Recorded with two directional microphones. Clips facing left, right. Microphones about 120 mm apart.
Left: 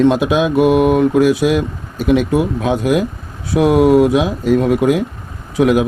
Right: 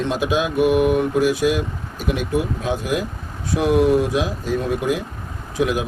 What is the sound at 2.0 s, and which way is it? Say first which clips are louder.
Speech: left 8 dB; 90° left.